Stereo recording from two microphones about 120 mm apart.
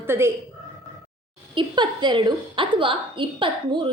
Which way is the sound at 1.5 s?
40° right (ahead or behind).